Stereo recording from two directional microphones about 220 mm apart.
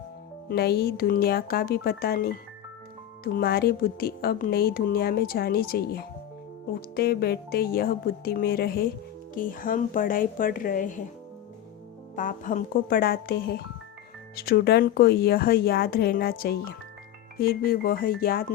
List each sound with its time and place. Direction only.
0.5 s a woman's voice: 45° left (ahead or behind)
12.1 s a woman's voice: 35° left (ahead or behind)